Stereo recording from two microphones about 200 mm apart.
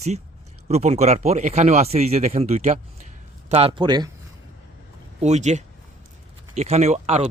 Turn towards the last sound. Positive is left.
turn(degrees=-30)  # may be behind; listen again after turning